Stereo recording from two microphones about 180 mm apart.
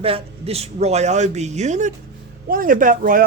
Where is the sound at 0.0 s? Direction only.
35° right (ahead or behind).